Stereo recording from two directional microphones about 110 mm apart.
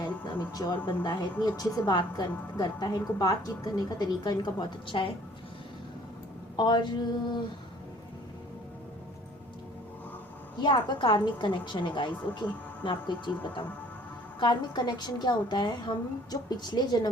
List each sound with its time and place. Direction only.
0.3 s a woman's voice: 35° left (ahead or behind); by 5.1 s 50° left (ahead or behind)
6.6 s a woman's voice: 40° left (ahead or behind)
10.6 s a woman's voice: 45° left (ahead or behind)